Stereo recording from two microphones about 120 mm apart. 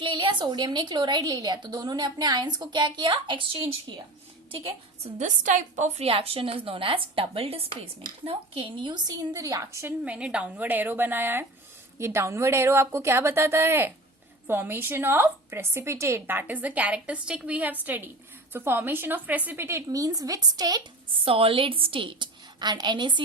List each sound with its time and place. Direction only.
0.0 s a woman's voice: 40° right (ahead or behind)
5.1 s a woman's voice: 85° right; by 9.9 s 25° right (ahead or behind)
10.0 s a woman's voice: 10° right (ahead or behind); by 20.8 s 35° right (ahead or behind)
21.2 s a woman's voice: 50° right (ahead or behind)